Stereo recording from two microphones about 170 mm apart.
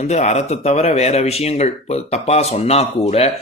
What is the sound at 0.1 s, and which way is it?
Speech, 40° left (ahead or behind).